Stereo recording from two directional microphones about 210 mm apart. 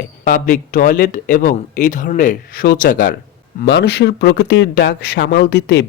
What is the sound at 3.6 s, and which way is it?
Speech, 55° left (ahead or behind).